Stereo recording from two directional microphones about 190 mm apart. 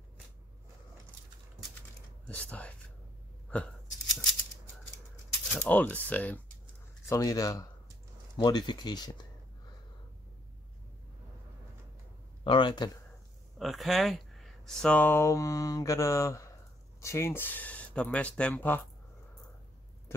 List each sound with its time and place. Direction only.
1.8 s typing: 5° left (ahead or behind)
3.4 s a sound: 5° left (ahead or behind)
5.6 s speech: 10° left (ahead or behind)
12.4 s speech: 25° left (ahead or behind)
13.6 s speech: centre (ahead or behind)